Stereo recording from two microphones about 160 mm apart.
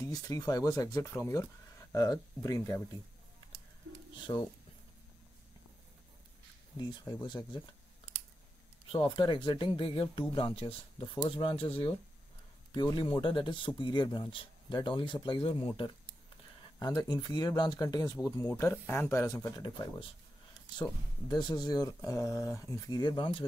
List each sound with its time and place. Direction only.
0.0 s speech: 20° left (ahead or behind)
4.2 s speech: 30° left (ahead or behind)
7.2 s speech: 25° left (ahead or behind)
8.9 s speech: 30° left (ahead or behind)